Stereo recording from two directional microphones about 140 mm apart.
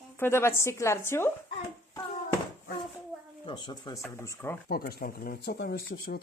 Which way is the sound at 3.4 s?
35° left (ahead or behind).